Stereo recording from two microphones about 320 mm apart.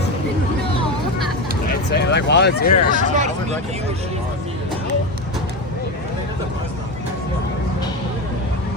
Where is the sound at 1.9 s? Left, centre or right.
Left.